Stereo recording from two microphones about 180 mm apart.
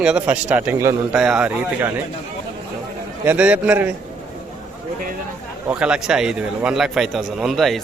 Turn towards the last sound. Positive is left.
turn(degrees=0)  # may be behind; listen again after turning